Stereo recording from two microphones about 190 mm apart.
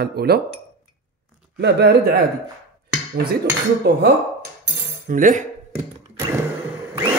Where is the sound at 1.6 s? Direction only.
60° right (ahead or behind).